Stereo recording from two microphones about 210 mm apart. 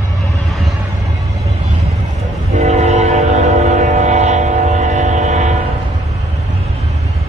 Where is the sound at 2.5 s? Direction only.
35° right (ahead or behind).